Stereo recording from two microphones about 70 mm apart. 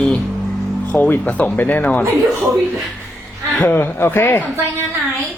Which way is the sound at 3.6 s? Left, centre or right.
Left.